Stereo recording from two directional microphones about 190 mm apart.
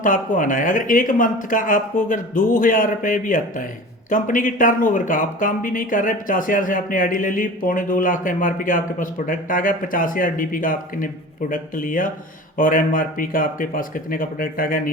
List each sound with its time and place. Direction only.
0.0 s speech: 45° left (ahead or behind)